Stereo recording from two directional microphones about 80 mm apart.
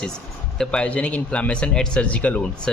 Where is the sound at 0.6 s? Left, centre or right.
Centre.